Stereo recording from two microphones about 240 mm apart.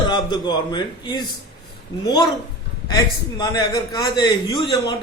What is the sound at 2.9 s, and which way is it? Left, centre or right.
A man's voice, centre.